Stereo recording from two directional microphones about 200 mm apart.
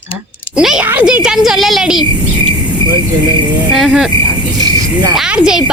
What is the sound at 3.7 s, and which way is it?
Speech, 5° right (ahead or behind).